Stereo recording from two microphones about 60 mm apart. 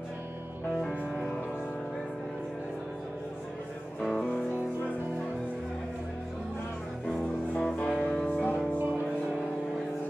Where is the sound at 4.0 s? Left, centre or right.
Centre.